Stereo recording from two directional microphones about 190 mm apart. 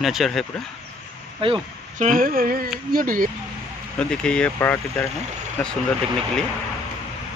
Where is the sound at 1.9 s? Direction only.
40° right (ahead or behind).